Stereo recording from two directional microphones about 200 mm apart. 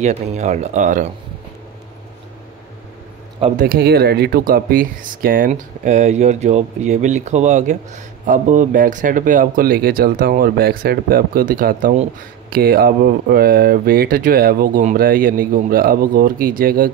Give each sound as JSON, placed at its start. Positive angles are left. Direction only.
{"t": 0.0, "sound": "speech", "side_deg": -35}
{"t": 3.5, "sound": "speech", "side_deg": -50}